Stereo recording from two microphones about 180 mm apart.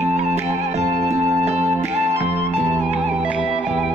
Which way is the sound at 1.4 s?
40° right (ahead or behind).